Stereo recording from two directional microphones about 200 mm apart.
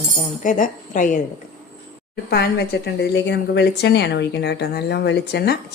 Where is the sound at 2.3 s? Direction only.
55° left (ahead or behind).